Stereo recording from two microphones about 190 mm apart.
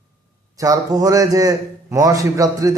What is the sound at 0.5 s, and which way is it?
A man's voice, 15° right (ahead or behind).